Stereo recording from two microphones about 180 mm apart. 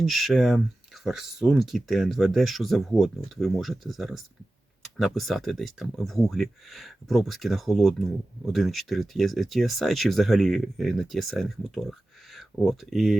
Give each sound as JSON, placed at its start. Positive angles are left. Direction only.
{"t": 0.0, "sound": "speech", "side_deg": 0}